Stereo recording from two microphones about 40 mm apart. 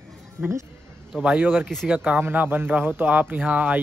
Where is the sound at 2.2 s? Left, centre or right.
Right.